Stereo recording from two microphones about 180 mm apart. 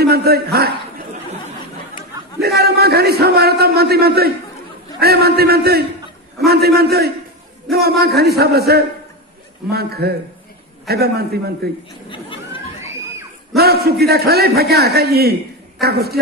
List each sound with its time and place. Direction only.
0.0 s a man's voice: 60° right (ahead or behind)
2.4 s a man's voice: 60° right (ahead or behind)
7.7 s a man's voice: centre (ahead or behind)
8.2 s a man's voice: 60° right (ahead or behind)
13.6 s a man's voice: 60° right (ahead or behind)